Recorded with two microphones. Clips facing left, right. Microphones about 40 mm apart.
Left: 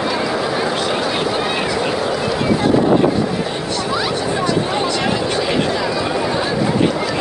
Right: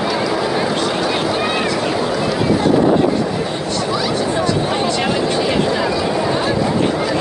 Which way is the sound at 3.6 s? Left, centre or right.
Left.